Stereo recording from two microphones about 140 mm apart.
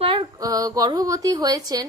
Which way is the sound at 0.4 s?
25° right (ahead or behind).